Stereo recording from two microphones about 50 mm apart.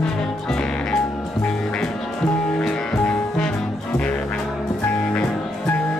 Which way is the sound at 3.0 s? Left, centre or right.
Left.